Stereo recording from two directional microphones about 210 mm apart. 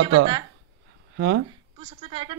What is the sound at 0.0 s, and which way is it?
Speech, 75° right (ahead or behind).